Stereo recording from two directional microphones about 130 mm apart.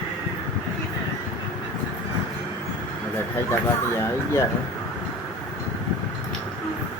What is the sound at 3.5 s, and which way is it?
Speech, 20° left (ahead or behind).